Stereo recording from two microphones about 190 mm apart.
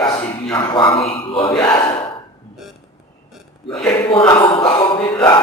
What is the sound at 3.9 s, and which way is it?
Speech, 20° left (ahead or behind).